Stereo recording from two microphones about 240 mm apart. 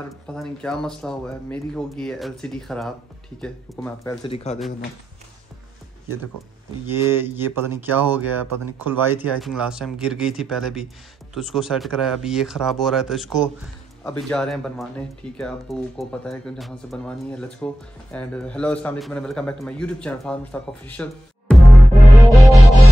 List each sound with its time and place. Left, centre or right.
0.3 s speech: centre
4.2 s a man's voice: left
6.9 s speech: centre
20.8 s music: centre